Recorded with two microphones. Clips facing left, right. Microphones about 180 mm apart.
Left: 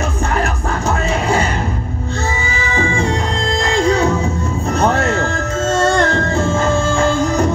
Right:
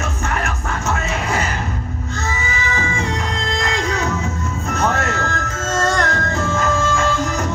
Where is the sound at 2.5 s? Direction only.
30° left (ahead or behind).